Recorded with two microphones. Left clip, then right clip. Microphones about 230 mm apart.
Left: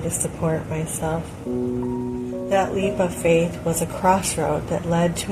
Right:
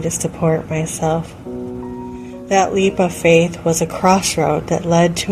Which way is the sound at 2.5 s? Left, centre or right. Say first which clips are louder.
Right 6 dB; right.